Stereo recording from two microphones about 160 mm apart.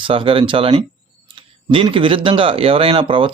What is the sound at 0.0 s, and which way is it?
Speech, 35° right (ahead or behind).